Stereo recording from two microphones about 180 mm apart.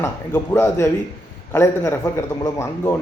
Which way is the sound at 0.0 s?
15° left (ahead or behind).